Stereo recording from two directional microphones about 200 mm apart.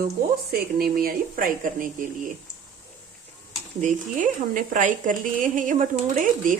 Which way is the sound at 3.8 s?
40° right (ahead or behind).